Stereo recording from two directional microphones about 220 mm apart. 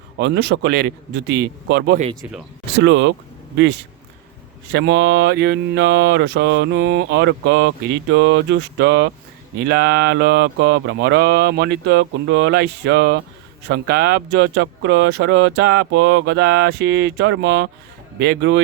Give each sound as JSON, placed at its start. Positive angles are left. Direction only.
{"t": 0.2, "sound": "mantra", "side_deg": -50}
{"t": 2.8, "sound": "speech", "side_deg": -55}
{"t": 4.7, "sound": "mantra", "side_deg": -55}